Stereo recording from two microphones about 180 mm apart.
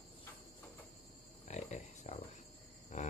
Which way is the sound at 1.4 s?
40° left (ahead or behind).